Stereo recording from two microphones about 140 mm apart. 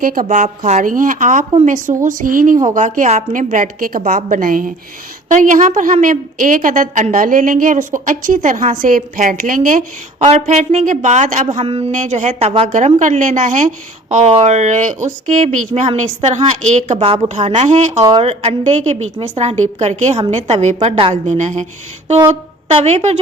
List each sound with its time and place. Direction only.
0.0 s a woman's voice: 85° right
2.6 s a woman's voice: 60° right (ahead or behind)
5.3 s a woman's voice: 65° right (ahead or behind)
10.2 s a woman's voice: 60° right (ahead or behind)
11.6 s speech: 40° right (ahead or behind)
11.9 s a woman's voice: 60° right (ahead or behind)
18.2 s a woman's voice: 45° right (ahead or behind)